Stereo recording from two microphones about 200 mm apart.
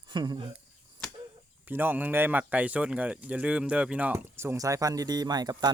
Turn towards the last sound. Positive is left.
turn(degrees=-20)  # may be behind; listen again after turning